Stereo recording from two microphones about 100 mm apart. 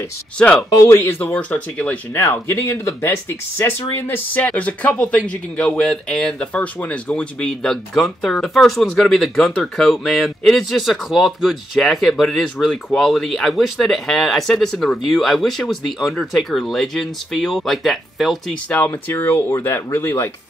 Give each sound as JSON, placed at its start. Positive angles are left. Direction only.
{"t": 0.4, "sound": "speech", "side_deg": 10}
{"t": 0.8, "sound": "speech", "side_deg": 25}
{"t": 1.3, "sound": "speech", "side_deg": 10}
{"t": 18.7, "sound": "speech", "side_deg": 20}